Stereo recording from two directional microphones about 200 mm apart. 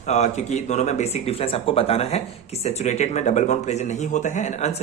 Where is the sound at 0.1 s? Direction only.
35° left (ahead or behind).